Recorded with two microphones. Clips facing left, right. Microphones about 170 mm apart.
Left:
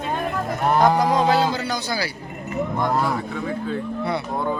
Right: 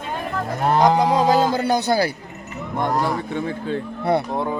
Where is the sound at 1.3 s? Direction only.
45° right (ahead or behind).